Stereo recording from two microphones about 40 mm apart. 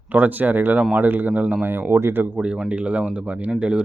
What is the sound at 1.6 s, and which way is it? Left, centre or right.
Speech, right.